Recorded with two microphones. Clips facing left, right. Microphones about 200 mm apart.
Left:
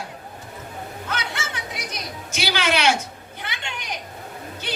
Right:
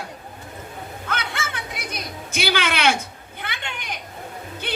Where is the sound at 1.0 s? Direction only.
55° right (ahead or behind).